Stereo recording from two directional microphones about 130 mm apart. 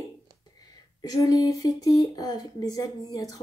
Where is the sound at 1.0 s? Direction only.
25° left (ahead or behind).